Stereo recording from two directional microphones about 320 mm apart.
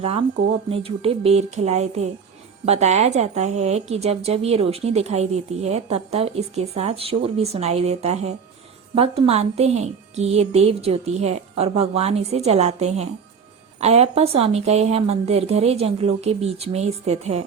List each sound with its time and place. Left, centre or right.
0.7 s a woman's voice: centre